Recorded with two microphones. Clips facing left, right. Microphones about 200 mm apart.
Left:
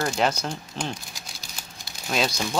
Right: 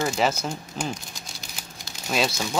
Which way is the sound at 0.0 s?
5° right (ahead or behind).